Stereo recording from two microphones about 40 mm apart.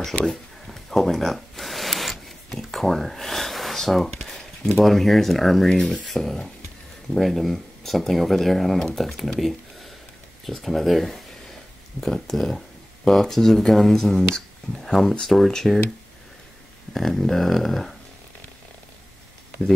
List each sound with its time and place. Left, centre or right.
0.2 s a sound: centre
4.7 s speech: centre
16.9 s speech: centre